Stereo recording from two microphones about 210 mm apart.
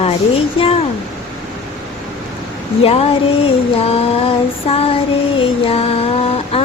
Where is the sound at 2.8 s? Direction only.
30° left (ahead or behind).